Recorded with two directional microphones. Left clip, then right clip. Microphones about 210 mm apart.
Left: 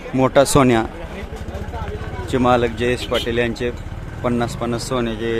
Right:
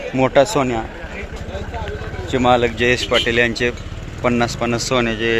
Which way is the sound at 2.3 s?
10° left (ahead or behind).